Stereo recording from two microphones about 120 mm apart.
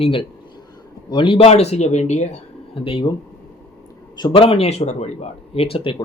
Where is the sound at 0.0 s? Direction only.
45° left (ahead or behind); by 2.4 s 70° left (ahead or behind).